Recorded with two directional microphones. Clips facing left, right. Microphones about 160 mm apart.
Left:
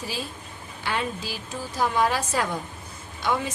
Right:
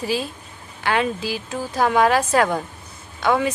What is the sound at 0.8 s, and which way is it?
A woman's voice, 70° right (ahead or behind).